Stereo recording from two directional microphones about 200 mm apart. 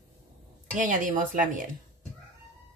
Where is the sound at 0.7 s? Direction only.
40° right (ahead or behind).